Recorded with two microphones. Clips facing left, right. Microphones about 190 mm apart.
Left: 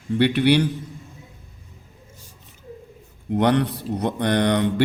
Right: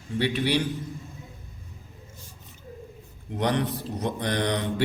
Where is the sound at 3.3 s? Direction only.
65° left (ahead or behind).